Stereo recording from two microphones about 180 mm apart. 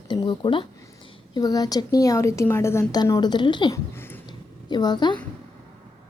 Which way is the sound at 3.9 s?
10° left (ahead or behind).